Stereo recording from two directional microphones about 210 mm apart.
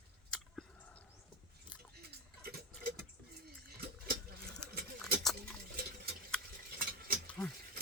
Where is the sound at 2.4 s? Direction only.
45° right (ahead or behind).